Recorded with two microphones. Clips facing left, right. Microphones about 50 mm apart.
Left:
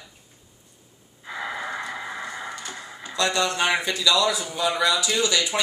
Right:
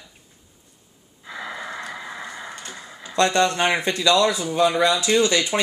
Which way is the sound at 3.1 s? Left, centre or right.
Right.